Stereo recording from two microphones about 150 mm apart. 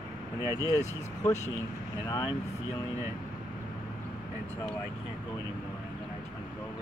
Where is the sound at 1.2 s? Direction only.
20° left (ahead or behind).